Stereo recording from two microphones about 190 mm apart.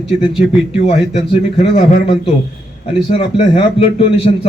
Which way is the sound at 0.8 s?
35° left (ahead or behind).